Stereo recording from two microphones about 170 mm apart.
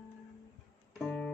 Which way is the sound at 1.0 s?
10° left (ahead or behind).